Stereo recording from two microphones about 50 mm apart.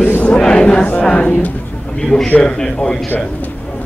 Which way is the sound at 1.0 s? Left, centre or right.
Left.